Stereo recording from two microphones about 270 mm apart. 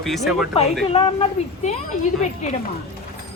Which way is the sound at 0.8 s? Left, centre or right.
Centre.